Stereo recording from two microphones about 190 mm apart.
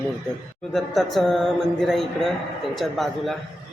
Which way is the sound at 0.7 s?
Centre (ahead or behind).